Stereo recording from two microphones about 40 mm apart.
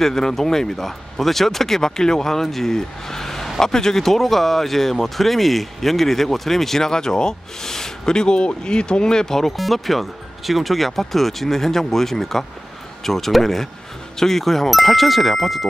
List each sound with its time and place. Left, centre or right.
0.0 s speech: centre
9.6 s speech: centre